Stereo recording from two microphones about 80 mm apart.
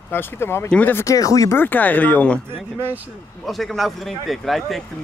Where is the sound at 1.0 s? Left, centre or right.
Left.